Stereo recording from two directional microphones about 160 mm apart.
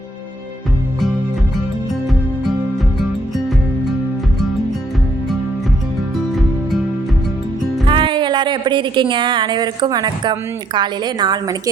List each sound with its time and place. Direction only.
7.9 s a woman's voice: 30° right (ahead or behind)